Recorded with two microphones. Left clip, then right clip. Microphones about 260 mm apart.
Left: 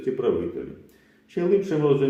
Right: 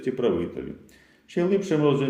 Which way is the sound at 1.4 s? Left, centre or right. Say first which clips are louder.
Even; right.